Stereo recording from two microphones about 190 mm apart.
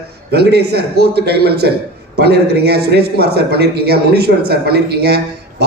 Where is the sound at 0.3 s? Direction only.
60° right (ahead or behind).